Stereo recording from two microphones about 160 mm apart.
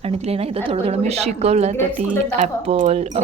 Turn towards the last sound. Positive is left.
turn(degrees=-45)  # may be behind; listen again after turning